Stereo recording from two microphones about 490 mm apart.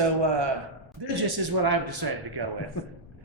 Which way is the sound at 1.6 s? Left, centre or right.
Right.